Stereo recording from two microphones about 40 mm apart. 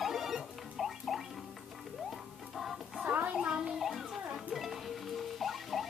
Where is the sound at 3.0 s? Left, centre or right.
Right.